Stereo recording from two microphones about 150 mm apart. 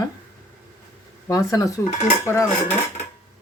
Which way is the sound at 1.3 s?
25° left (ahead or behind).